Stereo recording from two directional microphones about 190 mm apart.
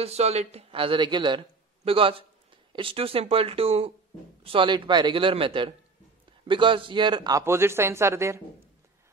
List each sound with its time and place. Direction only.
0.0 s speech: 35° right (ahead or behind); by 8.4 s 15° right (ahead or behind)